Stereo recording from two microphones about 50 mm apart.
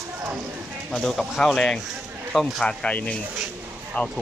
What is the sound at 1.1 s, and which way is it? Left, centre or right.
Speech, centre.